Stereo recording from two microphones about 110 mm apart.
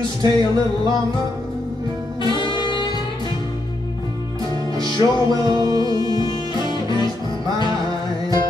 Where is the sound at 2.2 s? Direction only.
45° left (ahead or behind).